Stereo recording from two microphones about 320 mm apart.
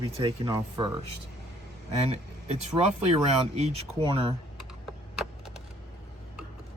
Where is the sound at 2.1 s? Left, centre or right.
Centre.